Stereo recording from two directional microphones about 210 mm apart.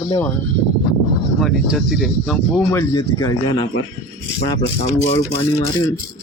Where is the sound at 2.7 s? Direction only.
15° left (ahead or behind).